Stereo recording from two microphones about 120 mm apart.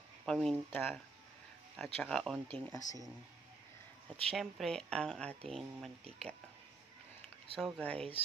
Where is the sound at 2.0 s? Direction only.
5° left (ahead or behind).